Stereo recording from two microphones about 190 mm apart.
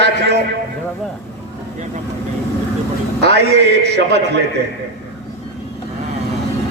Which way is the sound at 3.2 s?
60° right (ahead or behind).